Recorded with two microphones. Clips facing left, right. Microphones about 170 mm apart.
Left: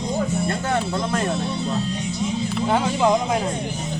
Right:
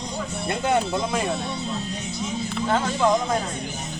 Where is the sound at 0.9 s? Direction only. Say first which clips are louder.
Left 1 dB; 5° right (ahead or behind).